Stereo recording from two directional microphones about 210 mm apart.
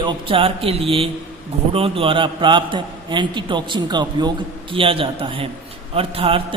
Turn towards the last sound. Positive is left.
turn(degrees=-25)  # may be behind; listen again after turning